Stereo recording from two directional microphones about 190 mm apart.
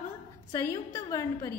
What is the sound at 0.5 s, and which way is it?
A woman's voice, 15° left (ahead or behind).